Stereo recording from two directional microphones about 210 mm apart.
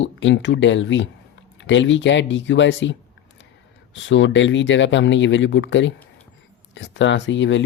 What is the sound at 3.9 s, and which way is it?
Speech, 60° left (ahead or behind).